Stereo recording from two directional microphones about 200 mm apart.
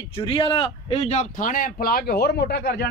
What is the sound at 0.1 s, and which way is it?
Speech, 25° left (ahead or behind).